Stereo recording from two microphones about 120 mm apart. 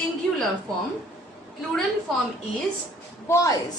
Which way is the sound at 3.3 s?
25° left (ahead or behind).